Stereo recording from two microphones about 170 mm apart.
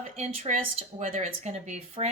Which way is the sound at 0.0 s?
40° right (ahead or behind).